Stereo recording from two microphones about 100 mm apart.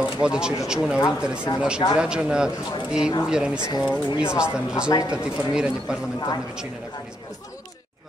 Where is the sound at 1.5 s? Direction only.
40° left (ahead or behind).